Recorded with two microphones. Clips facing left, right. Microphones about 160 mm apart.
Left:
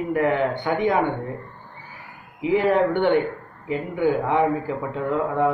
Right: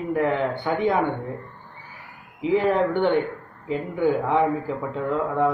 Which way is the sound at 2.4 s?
5° left (ahead or behind).